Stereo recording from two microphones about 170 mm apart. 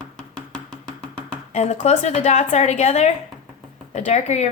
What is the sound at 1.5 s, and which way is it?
A woman's voice, 40° left (ahead or behind).